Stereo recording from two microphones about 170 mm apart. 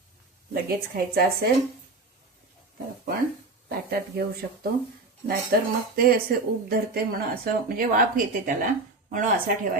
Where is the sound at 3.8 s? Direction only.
65° right (ahead or behind); by 8.5 s 50° right (ahead or behind).